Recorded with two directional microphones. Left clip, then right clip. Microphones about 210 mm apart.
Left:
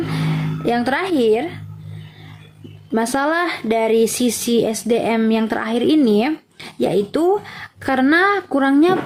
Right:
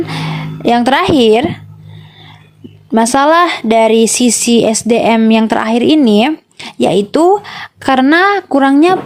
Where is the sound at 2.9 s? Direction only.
35° right (ahead or behind).